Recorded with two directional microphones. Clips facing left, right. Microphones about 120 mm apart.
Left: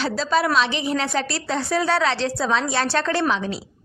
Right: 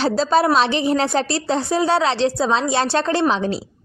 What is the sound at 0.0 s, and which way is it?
A woman's voice, 30° right (ahead or behind).